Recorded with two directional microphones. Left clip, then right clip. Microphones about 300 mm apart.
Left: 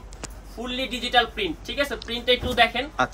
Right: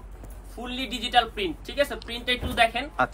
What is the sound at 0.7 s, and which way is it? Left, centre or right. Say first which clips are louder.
Speech: left 1 dB; centre.